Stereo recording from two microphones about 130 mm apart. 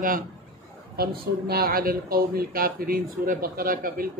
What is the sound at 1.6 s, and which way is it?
Speech, 90° right.